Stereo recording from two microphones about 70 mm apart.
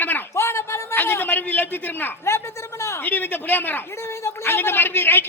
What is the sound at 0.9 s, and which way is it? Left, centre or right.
A man's voice, left.